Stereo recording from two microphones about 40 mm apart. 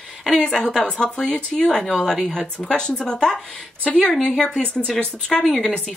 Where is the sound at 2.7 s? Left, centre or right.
Left.